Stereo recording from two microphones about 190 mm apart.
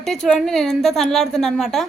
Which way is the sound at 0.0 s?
Centre (ahead or behind).